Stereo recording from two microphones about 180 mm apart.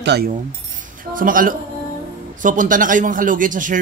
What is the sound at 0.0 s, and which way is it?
Speech, 70° right (ahead or behind).